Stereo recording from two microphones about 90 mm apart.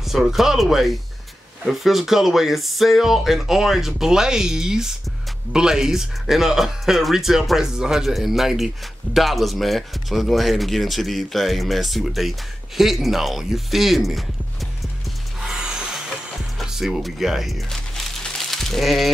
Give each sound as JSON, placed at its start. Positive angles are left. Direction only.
{"t": 0.0, "sound": "speech", "side_deg": -5}
{"t": 16.5, "sound": "music", "side_deg": 0}